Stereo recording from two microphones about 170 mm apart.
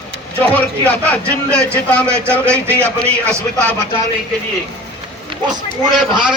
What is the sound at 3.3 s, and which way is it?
Speech, 5° left (ahead or behind).